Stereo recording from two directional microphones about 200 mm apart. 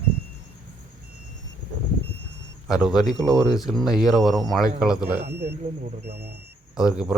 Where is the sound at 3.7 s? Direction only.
Centre (ahead or behind).